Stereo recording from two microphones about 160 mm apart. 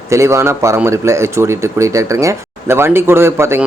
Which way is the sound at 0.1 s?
20° right (ahead or behind).